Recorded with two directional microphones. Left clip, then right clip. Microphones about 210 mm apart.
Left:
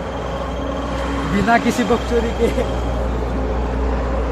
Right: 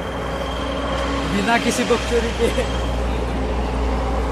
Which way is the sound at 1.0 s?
35° left (ahead or behind).